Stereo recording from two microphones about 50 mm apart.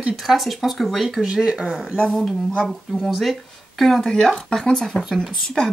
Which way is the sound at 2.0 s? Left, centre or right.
Centre.